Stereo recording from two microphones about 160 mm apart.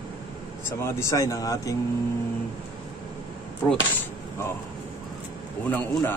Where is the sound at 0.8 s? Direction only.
15° left (ahead or behind).